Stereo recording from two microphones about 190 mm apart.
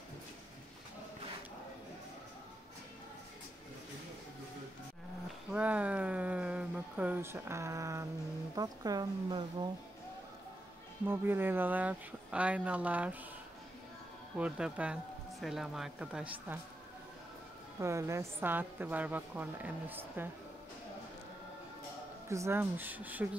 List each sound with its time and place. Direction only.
5.5 s a woman's voice: 5° right (ahead or behind)
11.1 s a woman's voice: 10° right (ahead or behind)
14.4 s speech: 5° right (ahead or behind)
17.7 s a woman's voice: 15° right (ahead or behind)
22.3 s a woman's voice: 15° right (ahead or behind)